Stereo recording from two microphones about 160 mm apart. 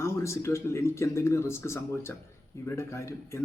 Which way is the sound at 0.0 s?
15° left (ahead or behind).